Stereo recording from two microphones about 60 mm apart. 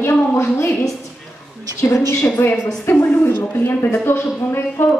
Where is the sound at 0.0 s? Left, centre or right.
Left.